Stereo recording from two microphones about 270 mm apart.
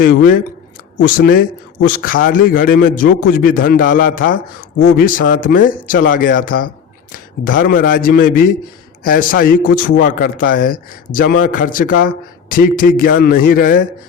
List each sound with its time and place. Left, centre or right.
0.0 s a man's voice: left